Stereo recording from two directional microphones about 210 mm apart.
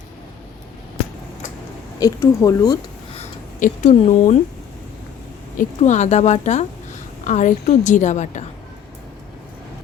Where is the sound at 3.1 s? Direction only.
35° left (ahead or behind).